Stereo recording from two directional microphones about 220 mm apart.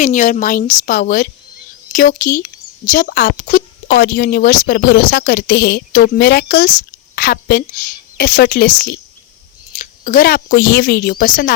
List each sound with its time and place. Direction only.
0.0 s a woman's voice: 35° left (ahead or behind)
3.8 s a woman's voice: 50° left (ahead or behind)